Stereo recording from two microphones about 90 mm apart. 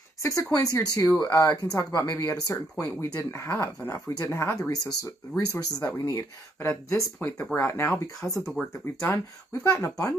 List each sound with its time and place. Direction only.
0.2 s speech: 35° left (ahead or behind)
3.5 s speech: 25° left (ahead or behind)
4.6 s speech: 40° left (ahead or behind)
6.6 s speech: 25° left (ahead or behind)
8.6 s speech: 15° left (ahead or behind)
9.0 s speech: 30° left (ahead or behind)